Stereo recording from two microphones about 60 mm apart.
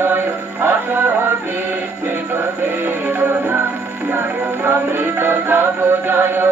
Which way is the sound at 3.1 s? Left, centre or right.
Right.